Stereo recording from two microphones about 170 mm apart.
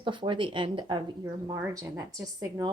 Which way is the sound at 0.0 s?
30° right (ahead or behind).